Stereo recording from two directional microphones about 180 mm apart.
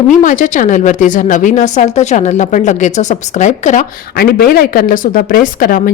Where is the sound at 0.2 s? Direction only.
45° left (ahead or behind).